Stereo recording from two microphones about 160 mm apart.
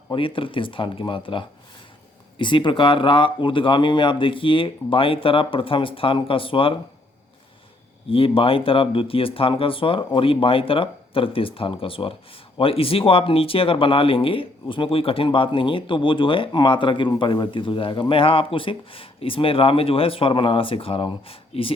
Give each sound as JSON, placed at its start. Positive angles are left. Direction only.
{"t": 0.1, "sound": "speech", "side_deg": 35}
{"t": 8.1, "sound": "speech", "side_deg": 35}